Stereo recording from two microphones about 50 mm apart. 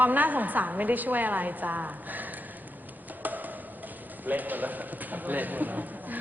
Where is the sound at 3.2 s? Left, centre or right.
Right.